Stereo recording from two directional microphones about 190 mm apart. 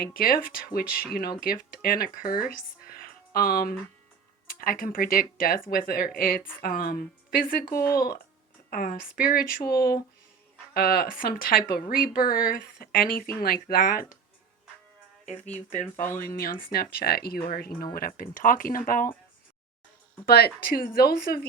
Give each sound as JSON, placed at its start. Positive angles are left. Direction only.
{"t": 0.0, "sound": "a woman's voice", "side_deg": 50}
{"t": 2.8, "sound": "a sound", "side_deg": 50}
{"t": 4.4, "sound": "a woman's voice", "side_deg": 50}
{"t": 15.5, "sound": "a woman's voice", "side_deg": 40}
{"t": 20.2, "sound": "a woman's voice", "side_deg": 55}